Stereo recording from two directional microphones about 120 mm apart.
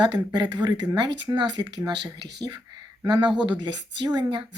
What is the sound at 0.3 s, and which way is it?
Speech, 35° right (ahead or behind).